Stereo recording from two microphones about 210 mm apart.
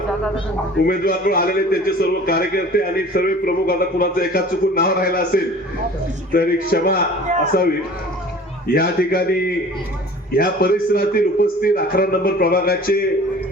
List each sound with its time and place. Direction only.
0.9 s a man's voice: 45° left (ahead or behind)
8.6 s a man's voice: 45° left (ahead or behind)